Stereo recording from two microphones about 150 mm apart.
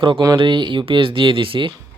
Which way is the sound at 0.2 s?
30° right (ahead or behind).